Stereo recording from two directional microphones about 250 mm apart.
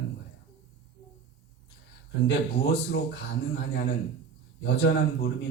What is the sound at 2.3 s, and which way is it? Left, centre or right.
Speech, left.